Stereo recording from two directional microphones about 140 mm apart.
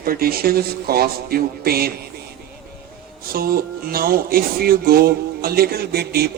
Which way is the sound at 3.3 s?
90° right.